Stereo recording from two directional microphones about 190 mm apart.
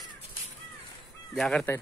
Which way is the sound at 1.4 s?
5° left (ahead or behind).